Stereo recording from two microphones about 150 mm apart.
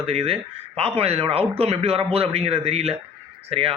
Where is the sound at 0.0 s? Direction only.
40° right (ahead or behind).